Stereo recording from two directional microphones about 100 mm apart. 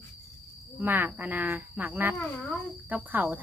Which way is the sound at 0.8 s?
20° right (ahead or behind).